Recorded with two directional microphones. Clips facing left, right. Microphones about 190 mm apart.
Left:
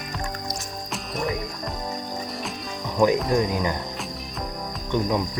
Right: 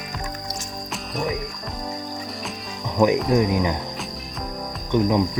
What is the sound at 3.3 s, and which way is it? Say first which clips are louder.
Speech: right 3 dB; 15° right (ahead or behind).